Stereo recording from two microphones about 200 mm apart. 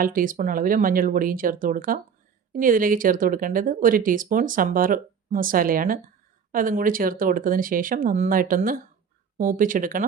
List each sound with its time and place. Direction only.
0.0 s speech: 45° right (ahead or behind)